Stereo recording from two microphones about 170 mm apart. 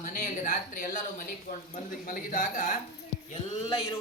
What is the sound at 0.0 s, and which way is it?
Speech, 50° left (ahead or behind).